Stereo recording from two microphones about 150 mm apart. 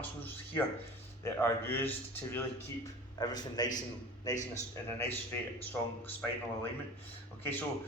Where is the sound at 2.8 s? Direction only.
25° left (ahead or behind).